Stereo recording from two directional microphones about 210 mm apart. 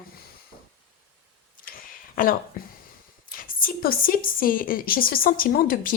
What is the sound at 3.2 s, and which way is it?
A woman's voice, 40° left (ahead or behind).